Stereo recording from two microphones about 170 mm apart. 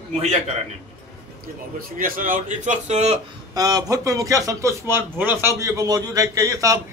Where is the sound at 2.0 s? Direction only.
55° right (ahead or behind).